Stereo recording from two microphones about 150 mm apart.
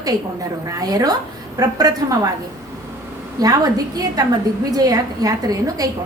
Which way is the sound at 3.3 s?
25° right (ahead or behind).